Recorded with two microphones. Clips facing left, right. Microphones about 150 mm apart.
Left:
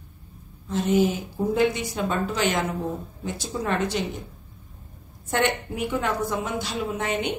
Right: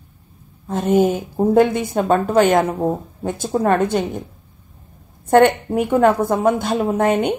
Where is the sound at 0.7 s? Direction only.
50° right (ahead or behind).